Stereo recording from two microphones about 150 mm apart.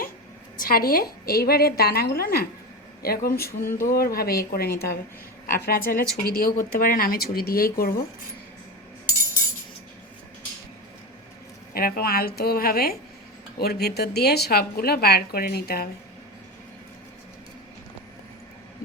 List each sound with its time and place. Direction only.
0.6 s a woman's voice: 75° left (ahead or behind)
3.6 s a sound: 15° left (ahead or behind)
3.9 s a woman's voice: 90° left
11.7 s a woman's voice: 85° left